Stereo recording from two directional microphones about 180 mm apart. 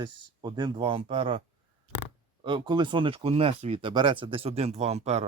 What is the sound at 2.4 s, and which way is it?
Speech, 25° right (ahead or behind).